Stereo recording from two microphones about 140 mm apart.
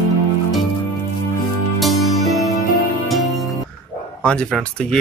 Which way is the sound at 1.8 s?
Centre (ahead or behind).